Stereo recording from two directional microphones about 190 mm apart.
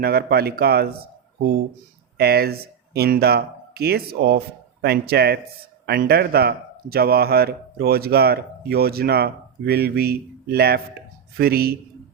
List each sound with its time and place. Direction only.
0.0 s speech: 55° right (ahead or behind)
2.1 s speech: 55° right (ahead or behind)